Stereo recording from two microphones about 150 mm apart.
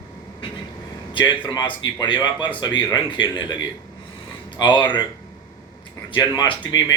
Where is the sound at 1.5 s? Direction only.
30° left (ahead or behind).